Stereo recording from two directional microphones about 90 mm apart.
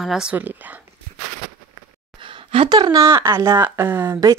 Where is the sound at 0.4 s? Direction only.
20° right (ahead or behind).